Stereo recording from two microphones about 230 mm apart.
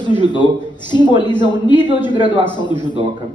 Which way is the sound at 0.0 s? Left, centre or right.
Centre.